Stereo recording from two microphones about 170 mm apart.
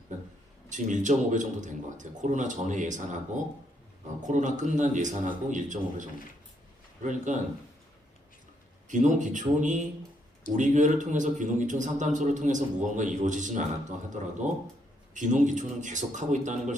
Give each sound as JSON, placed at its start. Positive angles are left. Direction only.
{"t": 0.7, "sound": "a man's voice", "side_deg": -45}
{"t": 4.3, "sound": "a man's voice", "side_deg": -45}
{"t": 8.9, "sound": "a man's voice", "side_deg": -45}